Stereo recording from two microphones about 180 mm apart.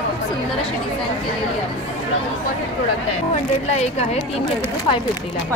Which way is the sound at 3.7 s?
35° left (ahead or behind).